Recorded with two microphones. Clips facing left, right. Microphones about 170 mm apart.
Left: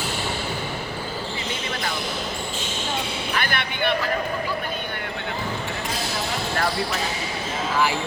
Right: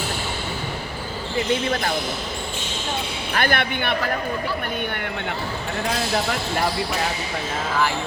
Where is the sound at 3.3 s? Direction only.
50° right (ahead or behind).